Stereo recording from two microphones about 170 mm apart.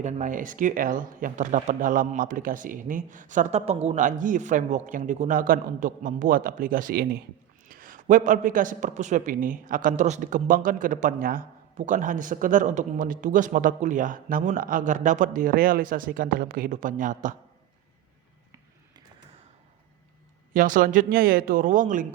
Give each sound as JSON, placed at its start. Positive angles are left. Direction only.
{"t": 0.0, "sound": "a man's voice", "side_deg": -45}
{"t": 20.5, "sound": "a man's voice", "side_deg": -50}